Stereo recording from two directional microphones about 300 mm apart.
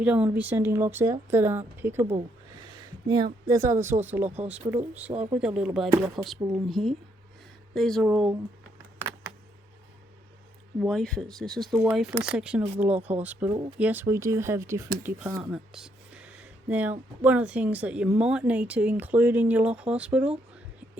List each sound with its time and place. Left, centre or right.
0.0 s a woman's voice: centre
3.4 s a woman's voice: centre
10.8 s speech: centre
13.5 s a woman's voice: centre
13.7 s speech: centre